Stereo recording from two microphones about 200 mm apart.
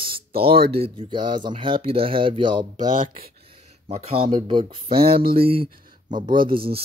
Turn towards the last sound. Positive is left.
turn(degrees=-50)  # may be behind; listen again after turning